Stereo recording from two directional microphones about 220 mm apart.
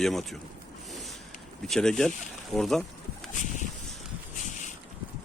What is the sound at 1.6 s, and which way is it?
Speech, centre (ahead or behind).